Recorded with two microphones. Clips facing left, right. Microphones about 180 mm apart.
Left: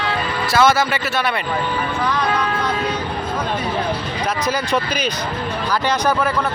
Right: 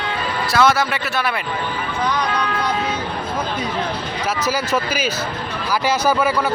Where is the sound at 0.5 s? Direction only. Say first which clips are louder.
Left 1 dB; centre (ahead or behind).